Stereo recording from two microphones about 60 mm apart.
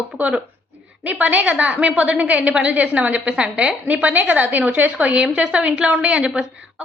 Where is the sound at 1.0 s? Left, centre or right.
Right.